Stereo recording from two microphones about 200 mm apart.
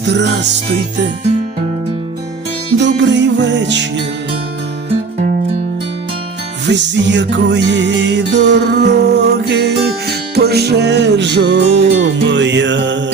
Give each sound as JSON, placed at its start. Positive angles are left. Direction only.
{"t": 2.8, "sound": "music", "side_deg": -65}
{"t": 6.7, "sound": "music", "side_deg": -65}